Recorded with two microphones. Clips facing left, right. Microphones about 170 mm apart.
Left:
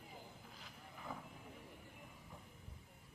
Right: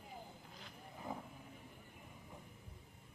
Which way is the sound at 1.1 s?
15° right (ahead or behind).